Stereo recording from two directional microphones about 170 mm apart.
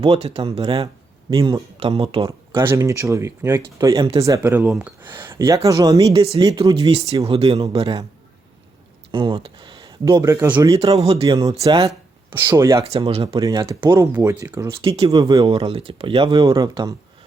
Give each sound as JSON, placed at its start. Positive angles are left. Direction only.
{"t": 0.0, "sound": "speech", "side_deg": -35}
{"t": 2.6, "sound": "speech", "side_deg": -15}
{"t": 6.1, "sound": "speech", "side_deg": -35}
{"t": 6.4, "sound": "speech", "side_deg": -20}
{"t": 6.7, "sound": "speech", "side_deg": -35}
{"t": 9.1, "sound": "speech", "side_deg": -30}
{"t": 10.9, "sound": "speech", "side_deg": -35}
{"t": 11.3, "sound": "speech", "side_deg": -20}
{"t": 12.8, "sound": "speech", "side_deg": -35}
{"t": 13.4, "sound": "speech", "side_deg": -20}
{"t": 14.8, "sound": "speech", "side_deg": -35}
{"t": 15.2, "sound": "speech", "side_deg": -20}
{"t": 15.4, "sound": "speech", "side_deg": -35}